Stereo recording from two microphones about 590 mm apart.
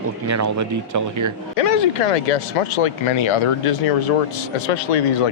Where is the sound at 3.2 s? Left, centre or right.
Left.